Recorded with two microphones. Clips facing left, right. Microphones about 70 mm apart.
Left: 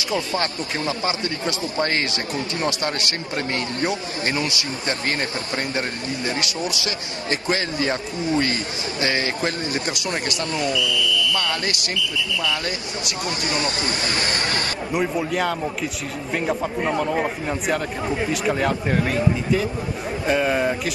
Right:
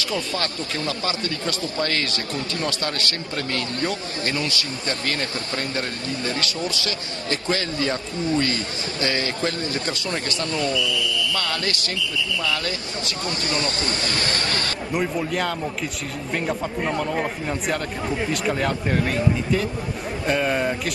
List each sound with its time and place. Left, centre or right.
0.1 s a man's voice: left
10.7 s a man's voice: right
11.3 s a man's voice: left
14.9 s speech: centre